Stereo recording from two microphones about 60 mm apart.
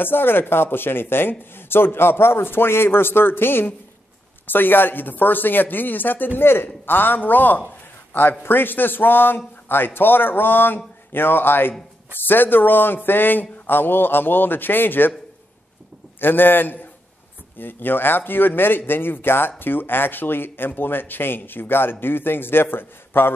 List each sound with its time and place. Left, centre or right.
0.0 s a man's voice: left
16.2 s a man's voice: left